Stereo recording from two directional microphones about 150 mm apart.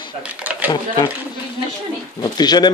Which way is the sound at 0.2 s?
10° right (ahead or behind).